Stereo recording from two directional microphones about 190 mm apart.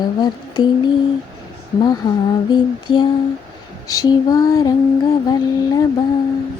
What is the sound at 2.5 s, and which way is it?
Speech, 25° left (ahead or behind).